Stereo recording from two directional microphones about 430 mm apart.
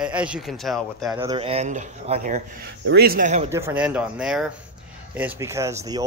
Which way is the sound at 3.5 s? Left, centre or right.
Centre.